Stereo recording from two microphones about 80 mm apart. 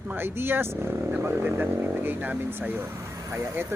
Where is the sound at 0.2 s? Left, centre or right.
Right.